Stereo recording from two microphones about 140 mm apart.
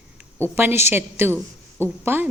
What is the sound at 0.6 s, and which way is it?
A woman's voice, 15° right (ahead or behind).